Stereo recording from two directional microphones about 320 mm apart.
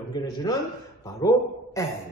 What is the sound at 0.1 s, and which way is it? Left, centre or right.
A woman's voice, centre.